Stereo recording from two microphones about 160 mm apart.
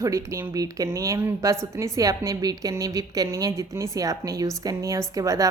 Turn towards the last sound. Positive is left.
turn(degrees=-20)  # may be behind; listen again after turning